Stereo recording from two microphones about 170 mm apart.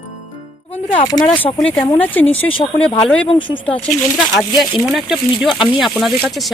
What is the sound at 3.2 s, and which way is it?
Speech, 30° left (ahead or behind).